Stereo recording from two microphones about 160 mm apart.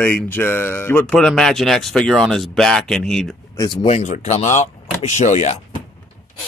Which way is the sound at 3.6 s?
25° left (ahead or behind).